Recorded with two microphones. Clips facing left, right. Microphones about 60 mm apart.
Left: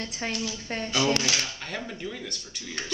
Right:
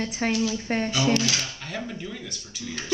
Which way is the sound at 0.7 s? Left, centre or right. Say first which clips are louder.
Right 6 dB; right.